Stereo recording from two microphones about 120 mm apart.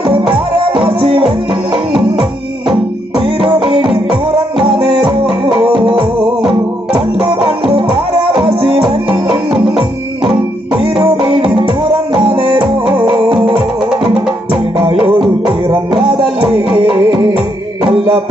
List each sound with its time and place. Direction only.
0.0 s music: 50° right (ahead or behind)
13.8 s music: 5° right (ahead or behind)
14.8 s music: 50° right (ahead or behind)